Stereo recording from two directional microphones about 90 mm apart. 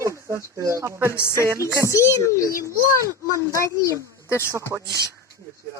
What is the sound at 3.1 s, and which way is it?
Speech, 35° right (ahead or behind).